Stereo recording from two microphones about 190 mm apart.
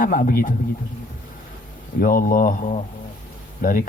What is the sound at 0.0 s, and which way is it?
Speech, 50° left (ahead or behind).